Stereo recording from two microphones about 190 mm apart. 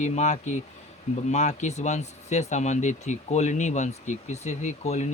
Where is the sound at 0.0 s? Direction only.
35° left (ahead or behind).